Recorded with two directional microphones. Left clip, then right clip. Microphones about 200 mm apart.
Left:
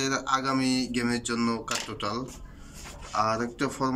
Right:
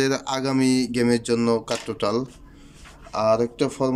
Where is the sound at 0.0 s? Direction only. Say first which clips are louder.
Right 3 dB; 30° right (ahead or behind).